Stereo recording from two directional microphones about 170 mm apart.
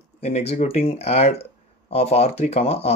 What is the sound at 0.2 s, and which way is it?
Speech, 40° left (ahead or behind).